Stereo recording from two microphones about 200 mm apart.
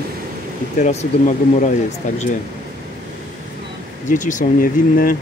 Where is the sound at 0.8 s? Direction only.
40° left (ahead or behind).